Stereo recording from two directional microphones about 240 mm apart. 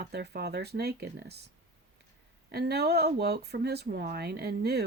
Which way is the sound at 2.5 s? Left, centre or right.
Right.